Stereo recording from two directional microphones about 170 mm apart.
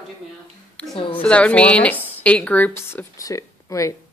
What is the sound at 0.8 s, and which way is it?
Speech, 10° left (ahead or behind).